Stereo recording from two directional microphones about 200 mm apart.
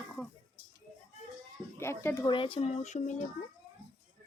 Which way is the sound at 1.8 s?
10° left (ahead or behind).